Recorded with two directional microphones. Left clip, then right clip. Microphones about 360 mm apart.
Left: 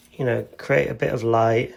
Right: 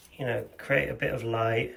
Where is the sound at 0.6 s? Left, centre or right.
Centre.